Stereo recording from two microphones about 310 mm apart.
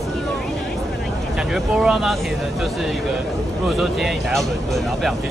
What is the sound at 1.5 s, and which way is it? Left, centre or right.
Speech, centre.